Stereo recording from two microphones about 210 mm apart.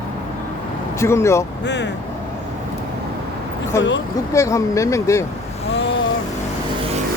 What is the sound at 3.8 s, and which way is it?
Speech, 60° left (ahead or behind).